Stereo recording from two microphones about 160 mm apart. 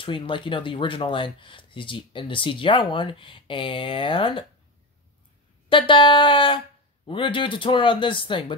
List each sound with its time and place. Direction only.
0.0 s speech: 30° left (ahead or behind)
5.7 s speech: 30° left (ahead or behind)